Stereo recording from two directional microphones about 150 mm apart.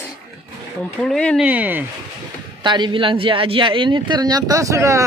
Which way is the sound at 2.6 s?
30° right (ahead or behind).